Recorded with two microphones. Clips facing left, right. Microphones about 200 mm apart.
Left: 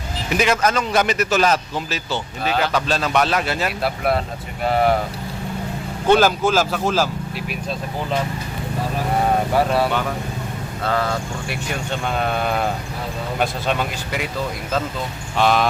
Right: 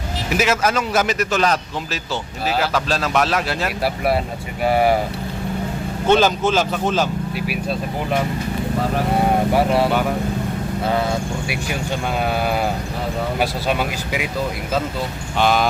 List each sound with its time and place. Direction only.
0.3 s speech: 5° right (ahead or behind)
6.1 s speech: 10° left (ahead or behind)
9.6 s speech: 20° right (ahead or behind)
11.7 s speech: 5° right (ahead or behind)
15.4 s speech: centre (ahead or behind)